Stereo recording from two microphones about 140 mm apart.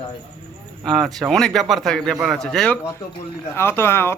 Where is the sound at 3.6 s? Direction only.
15° left (ahead or behind).